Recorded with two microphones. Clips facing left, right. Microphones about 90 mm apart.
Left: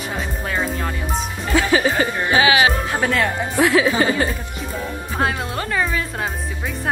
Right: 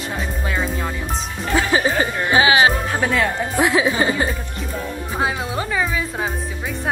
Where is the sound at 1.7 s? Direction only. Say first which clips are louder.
Left 1 dB; 25° right (ahead or behind).